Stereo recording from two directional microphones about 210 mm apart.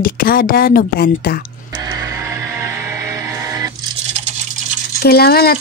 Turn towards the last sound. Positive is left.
turn(degrees=45)  # may be behind; listen again after turning